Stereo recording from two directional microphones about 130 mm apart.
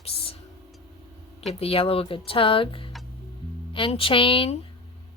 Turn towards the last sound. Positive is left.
turn(degrees=45)  # may be behind; listen again after turning